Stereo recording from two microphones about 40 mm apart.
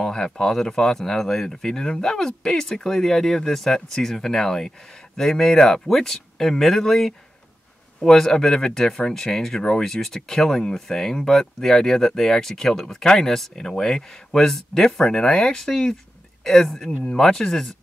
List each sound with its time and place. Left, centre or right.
0.0 s speech: centre